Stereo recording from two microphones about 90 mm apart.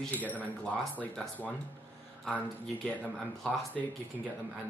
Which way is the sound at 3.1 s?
5° left (ahead or behind).